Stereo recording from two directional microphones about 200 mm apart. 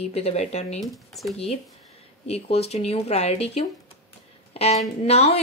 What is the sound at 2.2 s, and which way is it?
A woman's voice, 30° left (ahead or behind).